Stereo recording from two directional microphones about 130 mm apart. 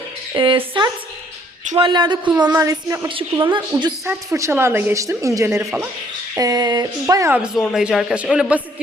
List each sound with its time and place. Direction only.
0.3 s a woman's voice: 40° right (ahead or behind)
2.5 s speech: 20° right (ahead or behind)
3.2 s a woman's voice: 40° right (ahead or behind)
4.0 s speech: 20° right (ahead or behind)
6.3 s speech: 30° right (ahead or behind)
7.3 s a man's voice: 10° right (ahead or behind)